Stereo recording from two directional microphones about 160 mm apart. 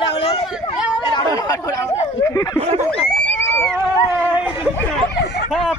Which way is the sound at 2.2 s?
20° left (ahead or behind).